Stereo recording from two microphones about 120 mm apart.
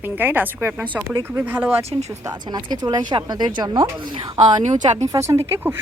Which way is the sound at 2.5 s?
35° right (ahead or behind).